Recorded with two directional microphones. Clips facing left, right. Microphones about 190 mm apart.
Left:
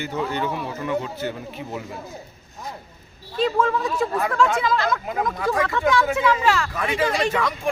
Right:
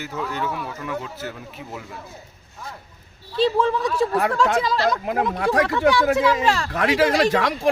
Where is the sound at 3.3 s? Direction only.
30° right (ahead or behind).